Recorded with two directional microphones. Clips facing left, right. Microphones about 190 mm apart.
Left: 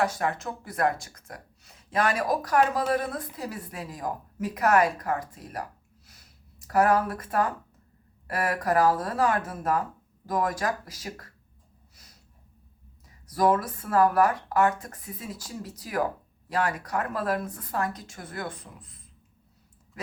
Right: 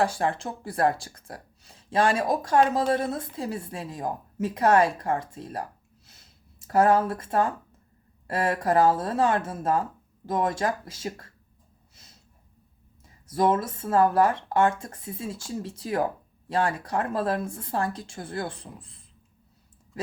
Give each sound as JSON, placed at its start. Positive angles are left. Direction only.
{"t": 0.0, "sound": "speech", "side_deg": -30}
{"t": 6.1, "sound": "a sound", "side_deg": -25}
{"t": 8.3, "sound": "speech", "side_deg": -25}
{"t": 11.9, "sound": "snort", "side_deg": -25}
{"t": 13.1, "sound": "speech", "side_deg": -25}